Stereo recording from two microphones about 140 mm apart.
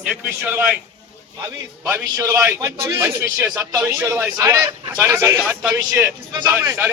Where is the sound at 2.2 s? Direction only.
15° right (ahead or behind).